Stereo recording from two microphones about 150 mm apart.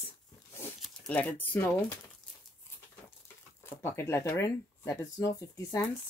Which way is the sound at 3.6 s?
15° left (ahead or behind).